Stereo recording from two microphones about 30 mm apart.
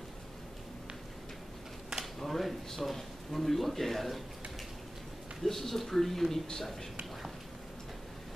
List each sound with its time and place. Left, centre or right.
2.1 s speech: centre
5.4 s speech: centre